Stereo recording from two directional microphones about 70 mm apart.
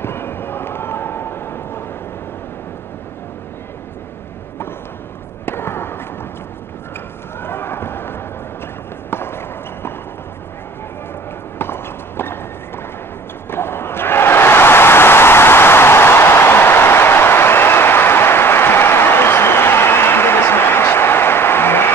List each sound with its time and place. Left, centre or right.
0.0 s a sound: left
5.4 s fireworks: left
7.3 s run: left
9.1 s clip-clop: left
11.5 s clip-clop: left
13.5 s a sound: left